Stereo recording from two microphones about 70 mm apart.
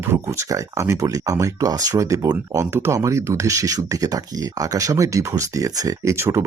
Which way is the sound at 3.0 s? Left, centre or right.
Right.